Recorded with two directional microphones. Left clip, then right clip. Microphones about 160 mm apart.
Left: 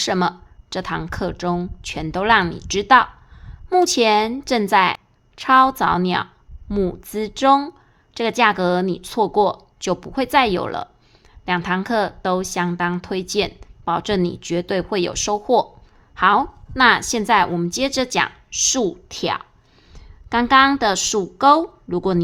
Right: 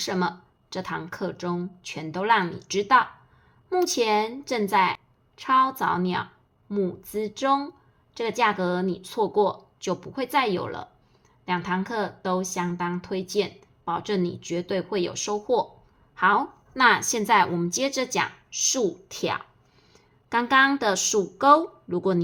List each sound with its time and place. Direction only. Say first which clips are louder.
0.0 s a woman's voice: left 7 dB; 45° left (ahead or behind)
16.1 s a woman's voice: left 6 dB; 40° left (ahead or behind)
16.7 s a woman's voice: left 5 dB; 25° left (ahead or behind)
18.5 s a woman's voice: left 4 dB; 45° left (ahead or behind)